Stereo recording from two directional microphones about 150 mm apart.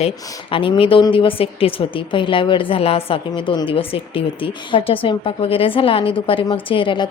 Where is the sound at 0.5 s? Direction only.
35° left (ahead or behind).